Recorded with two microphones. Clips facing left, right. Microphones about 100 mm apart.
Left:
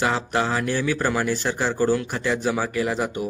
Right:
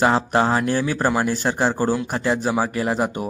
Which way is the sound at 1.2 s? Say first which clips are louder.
Right 3 dB; 45° right (ahead or behind).